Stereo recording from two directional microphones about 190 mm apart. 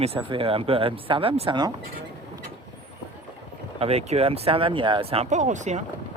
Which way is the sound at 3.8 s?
30° right (ahead or behind).